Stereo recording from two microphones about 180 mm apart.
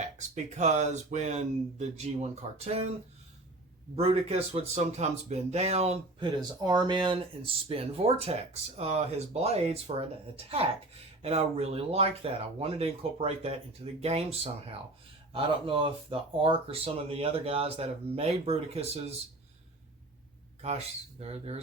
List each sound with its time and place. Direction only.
0.0 s speech: 40° right (ahead or behind)
3.9 s speech: 30° right (ahead or behind)
20.6 s speech: 35° right (ahead or behind)